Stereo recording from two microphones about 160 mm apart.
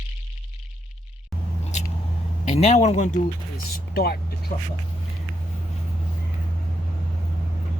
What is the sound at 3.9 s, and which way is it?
Speech, 75° left (ahead or behind).